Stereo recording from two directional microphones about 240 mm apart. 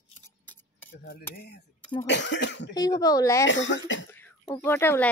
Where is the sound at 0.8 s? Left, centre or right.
Left.